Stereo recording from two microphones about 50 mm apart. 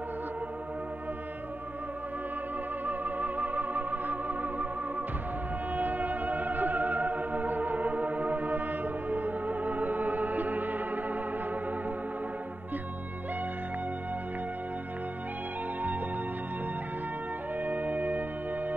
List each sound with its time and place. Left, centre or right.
2.9 s music: right
5.8 s music: right
17.6 s music: right